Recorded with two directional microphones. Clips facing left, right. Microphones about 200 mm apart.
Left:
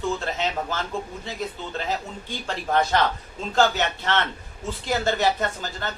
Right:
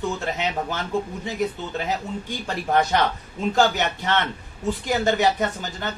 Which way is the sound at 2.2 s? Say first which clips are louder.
Right 2 dB; 15° right (ahead or behind).